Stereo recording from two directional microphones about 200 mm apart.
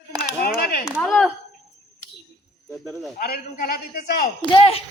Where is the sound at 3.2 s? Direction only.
50° left (ahead or behind).